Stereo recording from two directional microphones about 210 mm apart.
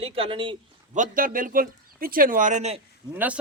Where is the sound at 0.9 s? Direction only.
40° right (ahead or behind).